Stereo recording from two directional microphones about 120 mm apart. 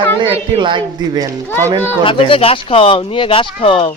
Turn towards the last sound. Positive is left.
turn(degrees=50)  # may be behind; listen again after turning